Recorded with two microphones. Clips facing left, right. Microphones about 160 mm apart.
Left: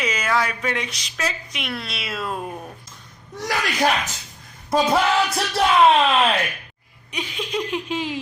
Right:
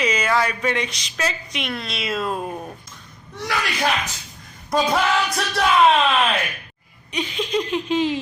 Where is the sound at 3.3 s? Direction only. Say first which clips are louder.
Left 1 dB; 40° left (ahead or behind).